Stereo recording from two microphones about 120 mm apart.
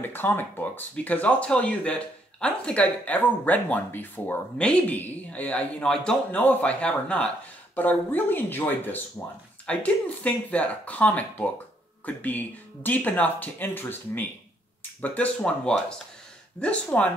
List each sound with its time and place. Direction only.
0.0 s speech: 15° left (ahead or behind)